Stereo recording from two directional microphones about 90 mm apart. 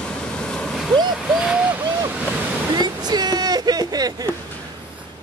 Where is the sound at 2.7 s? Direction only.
50° right (ahead or behind).